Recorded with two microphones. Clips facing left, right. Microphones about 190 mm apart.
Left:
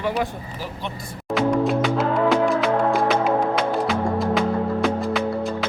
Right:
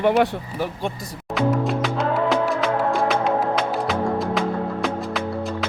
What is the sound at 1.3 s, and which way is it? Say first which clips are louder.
Music: left 2 dB; centre (ahead or behind).